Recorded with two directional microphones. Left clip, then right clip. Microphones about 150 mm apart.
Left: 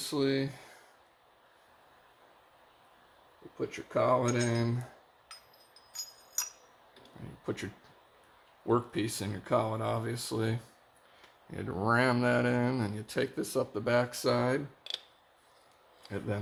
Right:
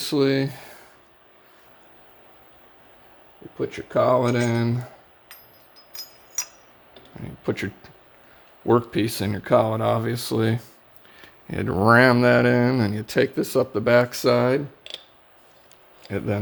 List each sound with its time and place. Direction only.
0.0 s speech: 70° right (ahead or behind)
3.7 s speech: 50° right (ahead or behind)
7.4 s speech: 65° right (ahead or behind)
16.0 s speech: 55° right (ahead or behind)